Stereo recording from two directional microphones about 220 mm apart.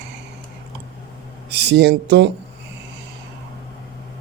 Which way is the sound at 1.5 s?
50° right (ahead or behind).